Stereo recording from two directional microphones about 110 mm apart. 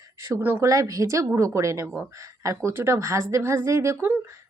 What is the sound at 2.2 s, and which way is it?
Speech, 30° right (ahead or behind).